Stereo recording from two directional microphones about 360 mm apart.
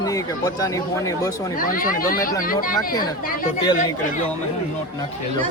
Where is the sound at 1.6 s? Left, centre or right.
Left.